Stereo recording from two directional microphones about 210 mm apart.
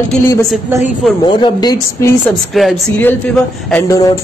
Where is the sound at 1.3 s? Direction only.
20° left (ahead or behind).